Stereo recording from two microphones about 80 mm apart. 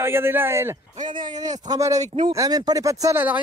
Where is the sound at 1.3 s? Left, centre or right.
Right.